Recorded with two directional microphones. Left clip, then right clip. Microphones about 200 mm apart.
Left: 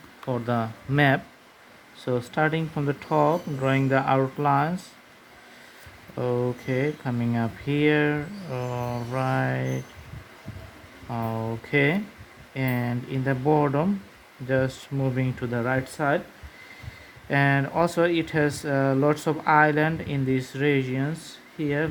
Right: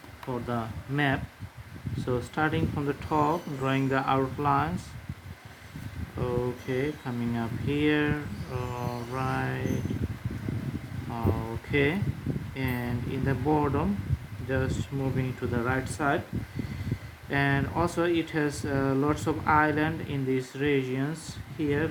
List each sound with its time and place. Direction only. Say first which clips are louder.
0.3 s speech: left 6 dB; 40° left (ahead or behind)
6.1 s speech: left 4 dB; 35° left (ahead or behind)
11.1 s speech: left 3 dB; 35° left (ahead or behind)
17.2 s speech: left 4 dB; 40° left (ahead or behind)